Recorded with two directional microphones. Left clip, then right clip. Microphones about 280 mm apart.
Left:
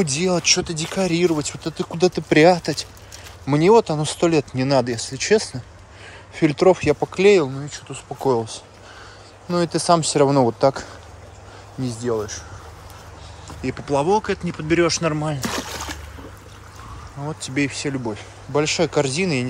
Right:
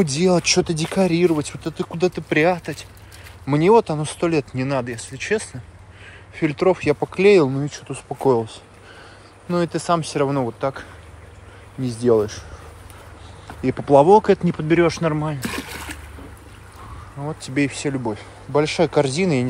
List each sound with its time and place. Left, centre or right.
0.0 s speech: centre
7.4 s speech: right
7.7 s speech: centre
11.8 s speech: centre
13.6 s speech: centre
15.4 s splash: centre
17.2 s speech: centre